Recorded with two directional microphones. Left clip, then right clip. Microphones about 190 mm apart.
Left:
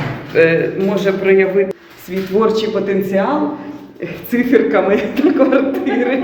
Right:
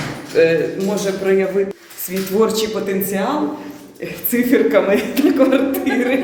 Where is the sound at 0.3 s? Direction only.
15° right (ahead or behind).